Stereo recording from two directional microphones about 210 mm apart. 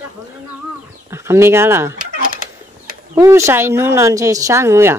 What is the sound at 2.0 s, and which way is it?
Fowl, 40° right (ahead or behind).